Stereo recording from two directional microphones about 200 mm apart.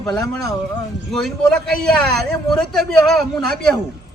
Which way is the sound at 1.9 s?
Centre (ahead or behind).